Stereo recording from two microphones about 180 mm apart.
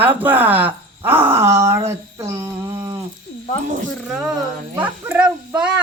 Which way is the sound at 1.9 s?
15° right (ahead or behind).